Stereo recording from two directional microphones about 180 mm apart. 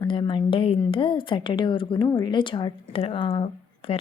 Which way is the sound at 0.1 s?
25° left (ahead or behind).